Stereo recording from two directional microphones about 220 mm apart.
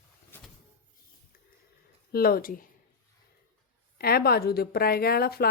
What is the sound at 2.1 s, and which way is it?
Speech, 45° left (ahead or behind).